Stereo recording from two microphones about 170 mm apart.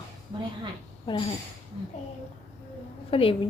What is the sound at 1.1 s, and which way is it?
Speech, 30° left (ahead or behind).